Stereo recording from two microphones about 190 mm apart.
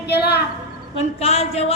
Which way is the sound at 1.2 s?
30° left (ahead or behind).